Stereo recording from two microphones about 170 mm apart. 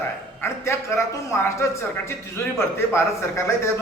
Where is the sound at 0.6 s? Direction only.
15° left (ahead or behind).